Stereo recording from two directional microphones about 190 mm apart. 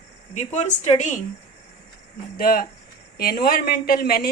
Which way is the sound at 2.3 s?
50° left (ahead or behind).